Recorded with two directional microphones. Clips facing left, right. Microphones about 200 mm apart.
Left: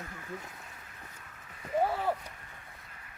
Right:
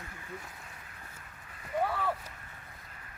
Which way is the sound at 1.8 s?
30° left (ahead or behind).